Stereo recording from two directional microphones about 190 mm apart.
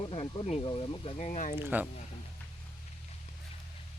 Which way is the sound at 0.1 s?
30° left (ahead or behind).